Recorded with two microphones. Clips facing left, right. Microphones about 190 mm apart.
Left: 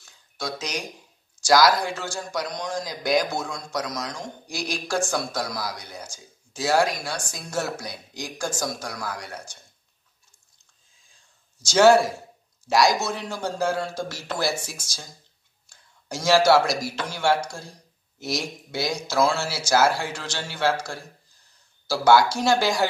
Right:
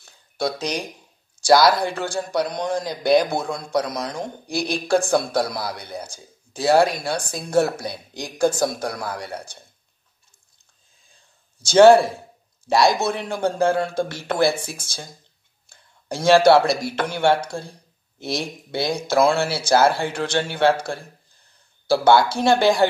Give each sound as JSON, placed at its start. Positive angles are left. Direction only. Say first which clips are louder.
{"t": 0.0, "sound": "a sound", "louder": "right 8 dB", "side_deg": -60}
{"t": 1.5, "sound": "speech", "louder": "right 3 dB", "side_deg": -30}
{"t": 1.8, "sound": "speech", "louder": "right 5 dB", "side_deg": -60}
{"t": 11.6, "sound": "speech", "louder": "right 5 dB", "side_deg": -55}